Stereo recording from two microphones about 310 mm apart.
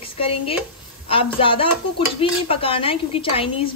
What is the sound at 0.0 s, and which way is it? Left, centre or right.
Speech, centre.